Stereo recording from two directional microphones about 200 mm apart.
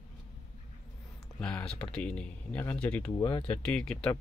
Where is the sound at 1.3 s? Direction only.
5° left (ahead or behind).